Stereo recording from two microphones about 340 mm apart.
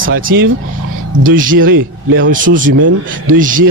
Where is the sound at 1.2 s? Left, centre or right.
Right.